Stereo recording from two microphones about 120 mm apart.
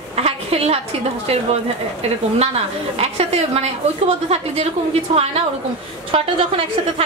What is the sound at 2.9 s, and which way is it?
A woman's voice, 60° right (ahead or behind).